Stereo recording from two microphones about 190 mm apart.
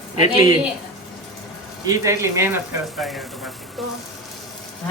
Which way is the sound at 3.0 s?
Centre (ahead or behind).